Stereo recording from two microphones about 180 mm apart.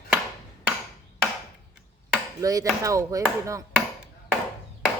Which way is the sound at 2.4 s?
20° right (ahead or behind).